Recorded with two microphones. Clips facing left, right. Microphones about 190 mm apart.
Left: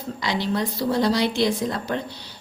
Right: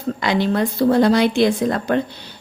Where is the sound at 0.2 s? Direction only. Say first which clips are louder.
Right 5 dB; 55° right (ahead or behind).